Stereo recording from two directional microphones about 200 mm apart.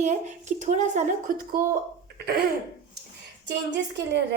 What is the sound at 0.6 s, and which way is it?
Speech, 35° right (ahead or behind).